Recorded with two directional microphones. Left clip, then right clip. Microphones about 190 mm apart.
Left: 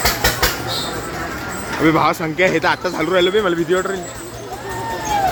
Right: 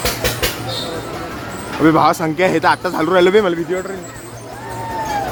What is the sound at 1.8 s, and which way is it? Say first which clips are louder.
Speech: right 3 dB; 15° right (ahead or behind).